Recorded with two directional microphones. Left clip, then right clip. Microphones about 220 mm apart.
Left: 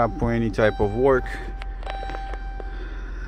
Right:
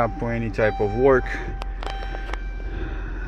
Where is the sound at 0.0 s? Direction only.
20° left (ahead or behind).